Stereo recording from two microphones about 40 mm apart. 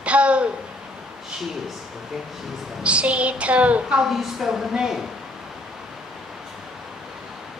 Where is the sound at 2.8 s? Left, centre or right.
Right.